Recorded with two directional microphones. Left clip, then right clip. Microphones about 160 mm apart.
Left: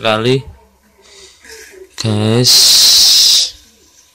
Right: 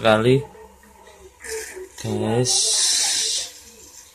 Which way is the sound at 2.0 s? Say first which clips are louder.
Left 8 dB; 50° left (ahead or behind).